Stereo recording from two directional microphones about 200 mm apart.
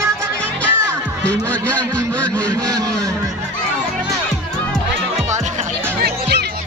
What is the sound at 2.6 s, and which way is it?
Speech, 15° right (ahead or behind).